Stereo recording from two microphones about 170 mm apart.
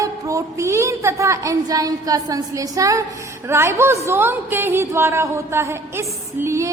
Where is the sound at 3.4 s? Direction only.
15° right (ahead or behind).